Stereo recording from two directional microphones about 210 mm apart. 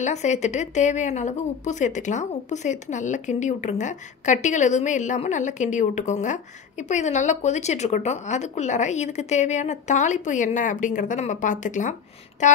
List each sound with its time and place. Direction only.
0.0 s a woman's voice: 35° left (ahead or behind)